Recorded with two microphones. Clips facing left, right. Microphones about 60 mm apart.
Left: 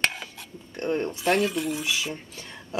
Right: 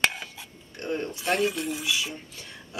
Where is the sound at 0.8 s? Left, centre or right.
Left.